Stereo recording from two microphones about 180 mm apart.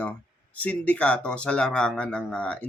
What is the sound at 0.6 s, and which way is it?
Speech, 10° left (ahead or behind).